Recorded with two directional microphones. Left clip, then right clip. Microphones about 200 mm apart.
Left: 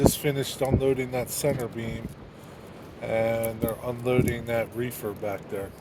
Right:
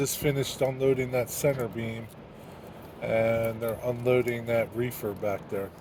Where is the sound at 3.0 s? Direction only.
15° left (ahead or behind).